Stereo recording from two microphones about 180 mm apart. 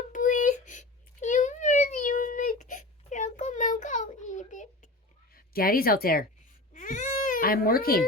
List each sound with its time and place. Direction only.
0.1 s a sound: 45° left (ahead or behind)
5.3 s speech: 55° left (ahead or behind)
6.7 s baby cry: 45° left (ahead or behind)